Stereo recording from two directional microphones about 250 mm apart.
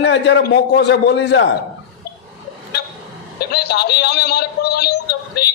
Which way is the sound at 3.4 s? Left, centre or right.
Left.